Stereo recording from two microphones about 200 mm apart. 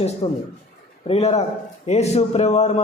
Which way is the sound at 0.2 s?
30° left (ahead or behind).